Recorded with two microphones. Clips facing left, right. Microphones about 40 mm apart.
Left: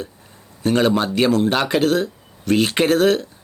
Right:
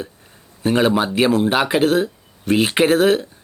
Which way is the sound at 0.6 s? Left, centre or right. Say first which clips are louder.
Right 1 dB; centre.